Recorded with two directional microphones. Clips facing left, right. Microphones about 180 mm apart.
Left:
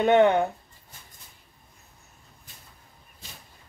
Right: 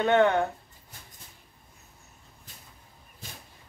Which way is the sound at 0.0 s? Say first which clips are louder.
Left 3 dB; 15° left (ahead or behind).